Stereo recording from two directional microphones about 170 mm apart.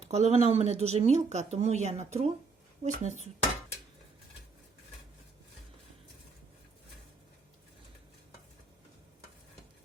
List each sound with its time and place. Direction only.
0.0 s speech: 40° right (ahead or behind)